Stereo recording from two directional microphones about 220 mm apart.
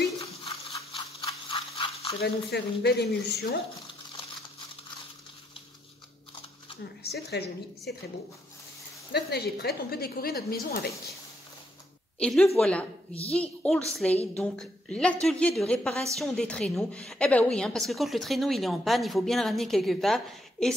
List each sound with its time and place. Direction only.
0.2 s rattle: 25° left (ahead or behind)
2.2 s a woman's voice: 50° left (ahead or behind)
6.8 s speech: 50° left (ahead or behind)
9.1 s a woman's voice: 50° left (ahead or behind)
12.2 s a woman's voice: 5° left (ahead or behind)